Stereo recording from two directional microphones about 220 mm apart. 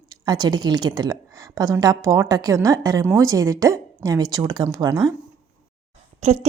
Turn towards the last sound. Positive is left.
turn(degrees=-30)  # may be behind; listen again after turning